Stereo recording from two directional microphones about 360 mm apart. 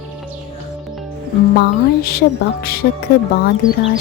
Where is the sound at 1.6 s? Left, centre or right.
Left.